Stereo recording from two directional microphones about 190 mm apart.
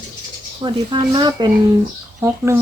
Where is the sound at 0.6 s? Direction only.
25° right (ahead or behind).